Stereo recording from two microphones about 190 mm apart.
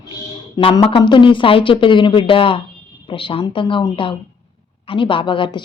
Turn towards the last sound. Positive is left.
turn(degrees=25)  # may be behind; listen again after turning